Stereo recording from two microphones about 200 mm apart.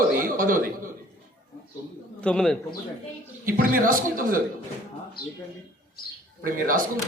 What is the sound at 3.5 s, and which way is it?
Speech, 45° right (ahead or behind).